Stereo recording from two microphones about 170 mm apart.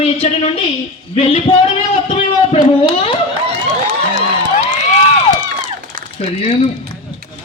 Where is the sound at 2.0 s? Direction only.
35° left (ahead or behind).